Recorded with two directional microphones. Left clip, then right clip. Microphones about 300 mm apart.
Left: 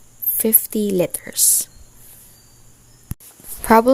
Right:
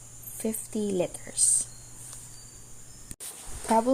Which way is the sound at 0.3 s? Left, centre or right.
Left.